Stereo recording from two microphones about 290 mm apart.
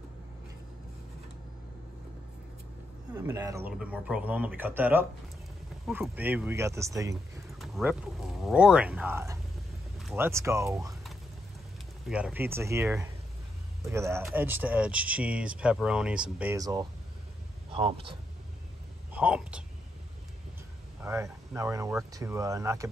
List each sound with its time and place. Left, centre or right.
3.2 s speech: centre
7.5 s a sound: centre
8.5 s speech: centre
12.1 s a man's voice: centre
19.1 s speech: centre
21.0 s speech: centre